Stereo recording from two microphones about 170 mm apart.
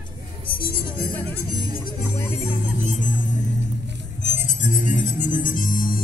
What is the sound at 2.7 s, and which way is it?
Music, 50° left (ahead or behind).